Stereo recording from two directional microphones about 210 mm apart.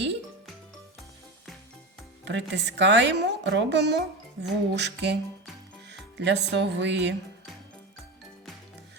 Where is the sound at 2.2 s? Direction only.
55° right (ahead or behind).